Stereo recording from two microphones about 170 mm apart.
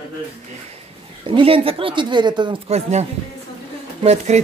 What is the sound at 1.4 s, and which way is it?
Speech, 30° right (ahead or behind).